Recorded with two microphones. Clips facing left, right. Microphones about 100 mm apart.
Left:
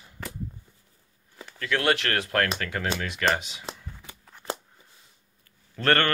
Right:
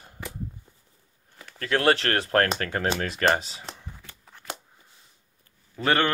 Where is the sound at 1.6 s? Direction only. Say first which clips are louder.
Right 3 dB; 35° right (ahead or behind).